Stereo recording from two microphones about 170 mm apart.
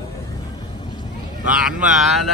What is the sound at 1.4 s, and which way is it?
Speech, 5° right (ahead or behind).